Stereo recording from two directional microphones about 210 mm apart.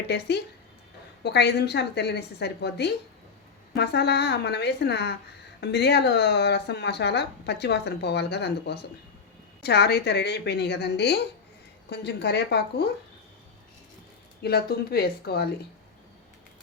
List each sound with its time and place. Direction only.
0.1 s speech: 50° left (ahead or behind)
14.4 s speech: 50° left (ahead or behind)